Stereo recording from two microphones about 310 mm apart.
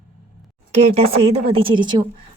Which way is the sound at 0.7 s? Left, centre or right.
Right.